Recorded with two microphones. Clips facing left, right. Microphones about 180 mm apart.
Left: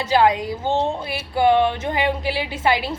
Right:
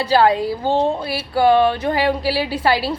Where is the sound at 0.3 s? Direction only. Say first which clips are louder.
Right 5 dB; 30° right (ahead or behind).